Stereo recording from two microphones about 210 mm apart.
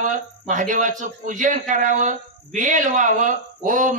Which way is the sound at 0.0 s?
40° right (ahead or behind).